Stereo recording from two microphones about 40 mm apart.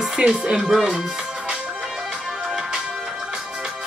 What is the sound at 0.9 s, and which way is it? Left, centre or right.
Speech, centre.